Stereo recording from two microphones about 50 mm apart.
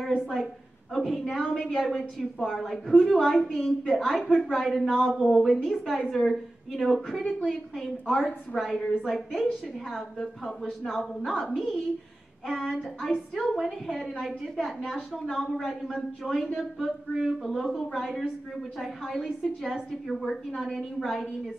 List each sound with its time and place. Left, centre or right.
0.9 s a woman's voice: centre
4.0 s a woman's voice: centre
4.3 s a woman's voice: centre
4.6 s a woman's voice: centre
14.2 s a woman's voice: centre